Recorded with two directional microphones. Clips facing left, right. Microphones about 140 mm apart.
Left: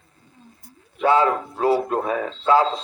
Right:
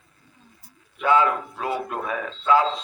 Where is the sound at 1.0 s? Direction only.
35° left (ahead or behind).